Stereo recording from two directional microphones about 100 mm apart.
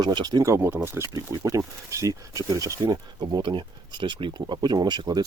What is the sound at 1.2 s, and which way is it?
Speech, 40° right (ahead or behind).